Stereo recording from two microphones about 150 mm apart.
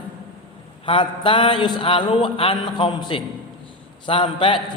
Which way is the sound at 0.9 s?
35° left (ahead or behind).